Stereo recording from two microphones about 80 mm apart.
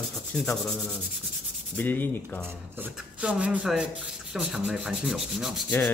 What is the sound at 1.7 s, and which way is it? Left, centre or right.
Sanding, left.